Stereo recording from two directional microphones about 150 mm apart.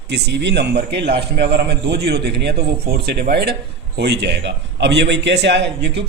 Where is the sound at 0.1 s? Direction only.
90° right.